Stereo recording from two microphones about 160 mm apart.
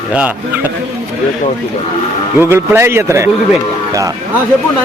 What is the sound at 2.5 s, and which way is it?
Speech, 15° right (ahead or behind).